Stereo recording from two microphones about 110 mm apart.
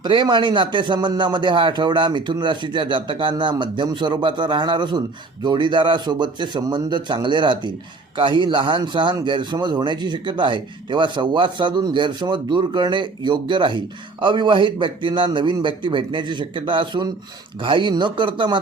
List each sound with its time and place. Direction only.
0.0 s speech: 45° right (ahead or behind)